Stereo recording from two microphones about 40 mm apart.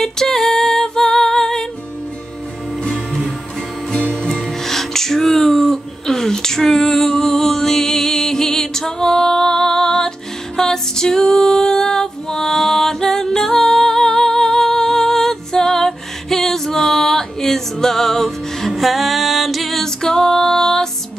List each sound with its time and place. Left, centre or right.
0.0 s music: centre
2.8 s music: centre
4.2 s music: centre
4.5 s music: centre
20.0 s music: centre